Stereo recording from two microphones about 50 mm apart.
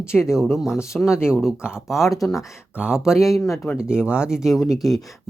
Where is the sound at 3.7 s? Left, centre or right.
Centre.